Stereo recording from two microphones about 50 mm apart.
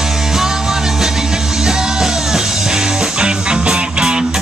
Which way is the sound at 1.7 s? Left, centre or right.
Centre.